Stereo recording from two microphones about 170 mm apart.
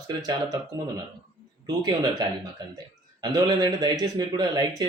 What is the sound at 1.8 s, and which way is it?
Speech, 25° right (ahead or behind).